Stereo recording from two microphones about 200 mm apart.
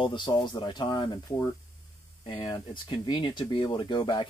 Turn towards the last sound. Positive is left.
turn(degrees=25)  # may be behind; listen again after turning